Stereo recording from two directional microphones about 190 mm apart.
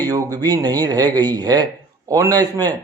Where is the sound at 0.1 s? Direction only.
20° right (ahead or behind).